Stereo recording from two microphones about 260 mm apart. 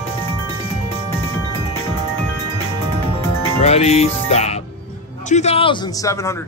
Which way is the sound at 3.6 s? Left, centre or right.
Left.